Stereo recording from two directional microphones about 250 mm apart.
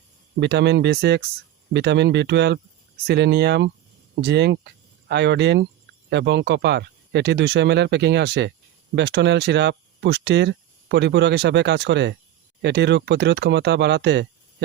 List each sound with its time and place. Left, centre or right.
0.3 s speech: right